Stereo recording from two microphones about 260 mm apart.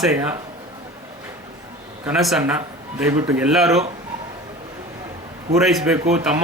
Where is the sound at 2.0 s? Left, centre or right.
Centre.